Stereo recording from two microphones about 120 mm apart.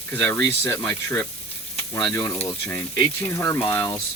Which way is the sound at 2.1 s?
20° left (ahead or behind).